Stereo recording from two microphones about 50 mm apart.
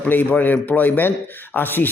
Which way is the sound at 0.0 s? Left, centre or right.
Left.